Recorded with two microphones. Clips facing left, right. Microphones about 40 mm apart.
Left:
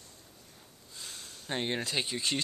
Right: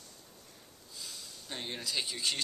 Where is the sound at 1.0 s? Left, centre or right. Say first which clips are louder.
Left 1 dB; left.